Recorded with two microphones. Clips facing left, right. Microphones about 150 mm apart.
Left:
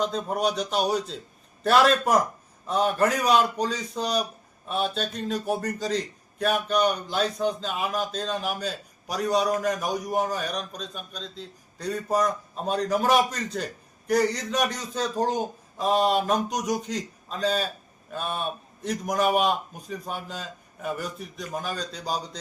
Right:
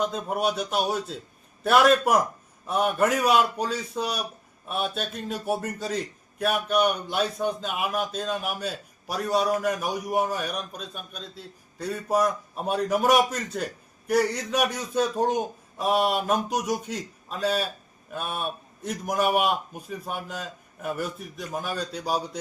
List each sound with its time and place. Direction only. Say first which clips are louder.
0.0 s a man's voice: even; 5° right (ahead or behind)